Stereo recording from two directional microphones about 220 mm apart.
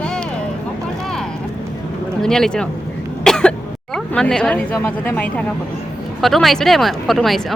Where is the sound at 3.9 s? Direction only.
5° left (ahead or behind).